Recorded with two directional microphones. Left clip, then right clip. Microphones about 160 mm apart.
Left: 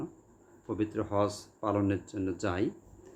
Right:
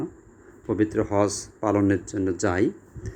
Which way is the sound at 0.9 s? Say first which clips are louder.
Right 8 dB; 25° right (ahead or behind).